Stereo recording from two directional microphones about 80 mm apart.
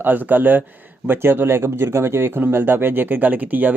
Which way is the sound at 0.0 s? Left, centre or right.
Right.